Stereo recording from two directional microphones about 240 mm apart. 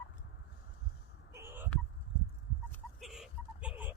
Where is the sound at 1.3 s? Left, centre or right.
Centre.